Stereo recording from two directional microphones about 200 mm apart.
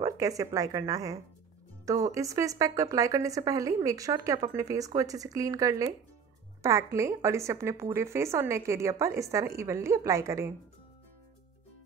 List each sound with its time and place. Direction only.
0.0 s a woman's voice: 15° right (ahead or behind)